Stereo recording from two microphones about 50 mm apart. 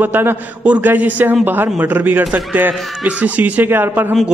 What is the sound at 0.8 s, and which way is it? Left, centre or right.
A man's voice, right.